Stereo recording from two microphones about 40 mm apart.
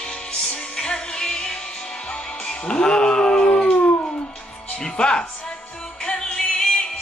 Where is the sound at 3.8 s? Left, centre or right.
Left.